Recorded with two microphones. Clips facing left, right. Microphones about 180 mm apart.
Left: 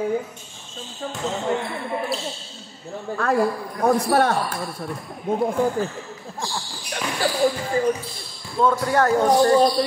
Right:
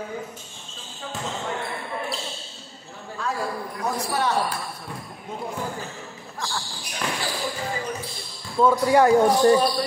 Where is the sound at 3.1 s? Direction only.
60° left (ahead or behind).